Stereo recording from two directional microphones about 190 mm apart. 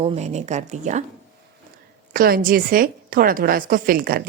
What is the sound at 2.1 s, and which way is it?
A woman's voice, 50° right (ahead or behind).